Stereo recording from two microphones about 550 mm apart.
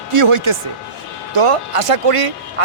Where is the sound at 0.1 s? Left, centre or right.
Right.